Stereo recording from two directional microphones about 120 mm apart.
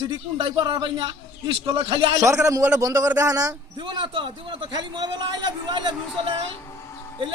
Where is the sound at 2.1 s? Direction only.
25° right (ahead or behind).